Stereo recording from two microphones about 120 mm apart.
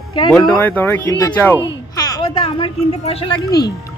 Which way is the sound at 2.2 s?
50° left (ahead or behind).